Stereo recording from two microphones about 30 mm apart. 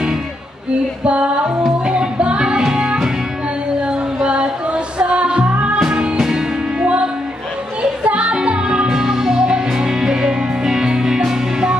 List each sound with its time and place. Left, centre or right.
1.0 s music: right
8.5 s music: right
8.8 s music: centre